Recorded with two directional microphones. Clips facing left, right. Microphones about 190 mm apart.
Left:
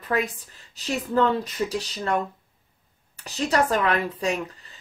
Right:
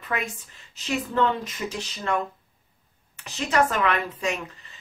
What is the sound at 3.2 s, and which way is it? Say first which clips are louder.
Speech: even; 35° left (ahead or behind).